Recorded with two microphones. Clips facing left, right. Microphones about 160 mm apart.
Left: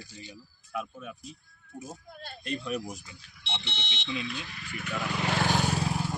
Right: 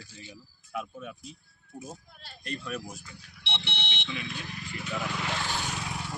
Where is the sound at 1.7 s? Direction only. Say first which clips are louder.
Left 1 dB; 50° left (ahead or behind).